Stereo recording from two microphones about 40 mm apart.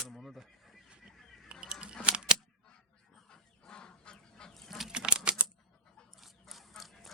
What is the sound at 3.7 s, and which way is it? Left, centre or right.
Goose, left.